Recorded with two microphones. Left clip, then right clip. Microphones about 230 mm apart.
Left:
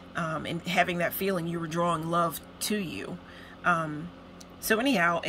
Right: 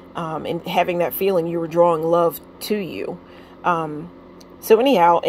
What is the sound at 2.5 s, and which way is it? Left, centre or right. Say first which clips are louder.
Speech: right 8 dB; centre.